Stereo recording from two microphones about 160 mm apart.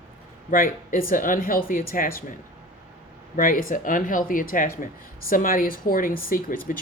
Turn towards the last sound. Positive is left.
turn(degrees=60)  # may be behind; listen again after turning